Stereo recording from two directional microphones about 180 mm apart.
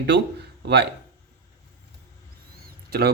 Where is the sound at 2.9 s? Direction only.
60° right (ahead or behind).